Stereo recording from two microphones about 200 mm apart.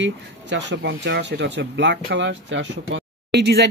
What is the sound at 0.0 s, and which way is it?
Speech, 60° right (ahead or behind).